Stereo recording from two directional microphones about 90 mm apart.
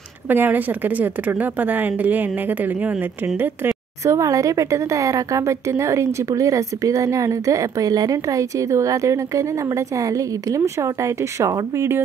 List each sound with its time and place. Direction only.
0.3 s a woman's voice: 20° right (ahead or behind)
4.0 s a woman's voice: 35° right (ahead or behind)